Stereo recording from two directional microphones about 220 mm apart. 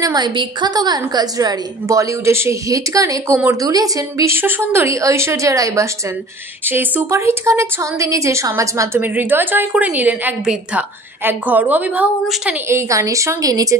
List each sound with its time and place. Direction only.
0.0 s a woman's voice: 20° right (ahead or behind)